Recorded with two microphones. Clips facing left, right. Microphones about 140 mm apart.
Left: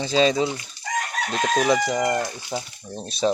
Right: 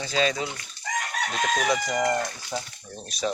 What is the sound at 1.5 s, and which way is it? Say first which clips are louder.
Chicken: left 6 dB; 50° left (ahead or behind).